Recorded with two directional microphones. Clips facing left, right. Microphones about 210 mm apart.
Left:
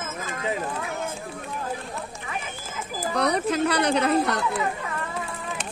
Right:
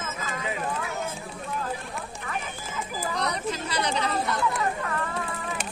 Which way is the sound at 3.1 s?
60° left (ahead or behind).